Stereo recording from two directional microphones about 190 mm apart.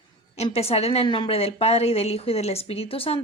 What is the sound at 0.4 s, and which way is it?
A woman's voice, 30° left (ahead or behind).